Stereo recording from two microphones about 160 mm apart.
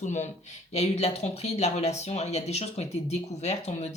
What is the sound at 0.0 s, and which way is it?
Speech, 50° left (ahead or behind).